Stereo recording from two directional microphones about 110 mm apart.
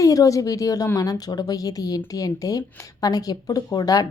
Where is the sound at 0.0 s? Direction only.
30° left (ahead or behind).